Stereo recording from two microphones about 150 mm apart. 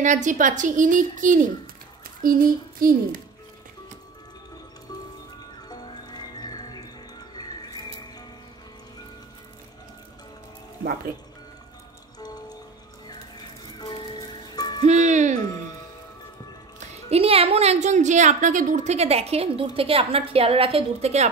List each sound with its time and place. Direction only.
0.0 s a woman's voice: 55° right (ahead or behind)
5.7 s music: 30° left (ahead or behind)
12.2 s music: 25° left (ahead or behind)
13.7 s music: 30° left (ahead or behind)
14.8 s a woman's voice: 55° right (ahead or behind)
15.3 s music: 25° left (ahead or behind)
17.1 s a woman's voice: 40° right (ahead or behind)